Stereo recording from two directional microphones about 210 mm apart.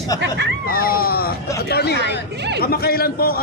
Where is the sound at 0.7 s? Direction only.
45° left (ahead or behind).